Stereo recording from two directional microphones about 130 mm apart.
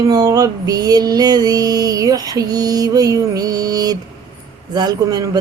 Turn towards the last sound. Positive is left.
turn(degrees=-30)  # may be behind; listen again after turning